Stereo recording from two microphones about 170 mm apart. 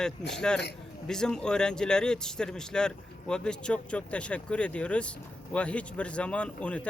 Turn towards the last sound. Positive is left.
turn(degrees=5)  # may be behind; listen again after turning